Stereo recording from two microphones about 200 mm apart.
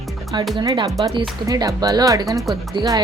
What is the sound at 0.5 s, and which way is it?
Speech, 20° right (ahead or behind).